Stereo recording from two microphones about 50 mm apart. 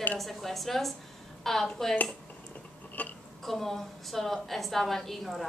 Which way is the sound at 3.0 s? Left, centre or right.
Left.